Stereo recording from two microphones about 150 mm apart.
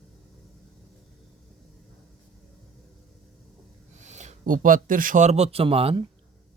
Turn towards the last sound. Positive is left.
turn(degrees=-40)  # may be behind; listen again after turning